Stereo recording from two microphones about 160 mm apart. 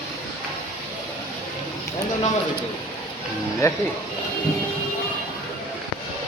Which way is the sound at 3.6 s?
20° left (ahead or behind).